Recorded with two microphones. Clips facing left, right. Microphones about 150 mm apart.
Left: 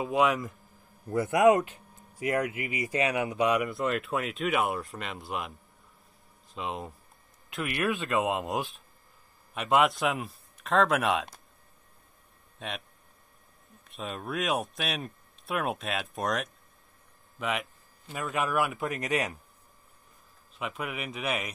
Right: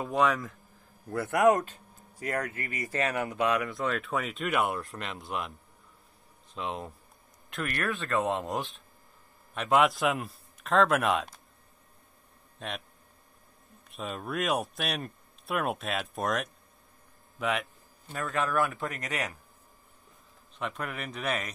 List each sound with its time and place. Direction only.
0.0 s speech: 5° left (ahead or behind)
1.1 s speech: 15° left (ahead or behind); by 5.5 s centre (ahead or behind)
6.5 s speech: centre (ahead or behind)
12.5 s speech: centre (ahead or behind)
13.8 s speech: centre (ahead or behind)
18.1 s speech: 15° left (ahead or behind)
20.5 s speech: 5° left (ahead or behind)